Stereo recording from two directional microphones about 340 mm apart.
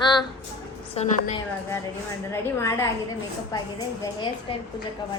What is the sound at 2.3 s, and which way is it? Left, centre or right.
A woman's voice, centre.